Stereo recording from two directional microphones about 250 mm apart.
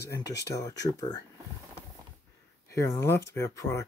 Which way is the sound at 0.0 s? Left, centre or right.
Left.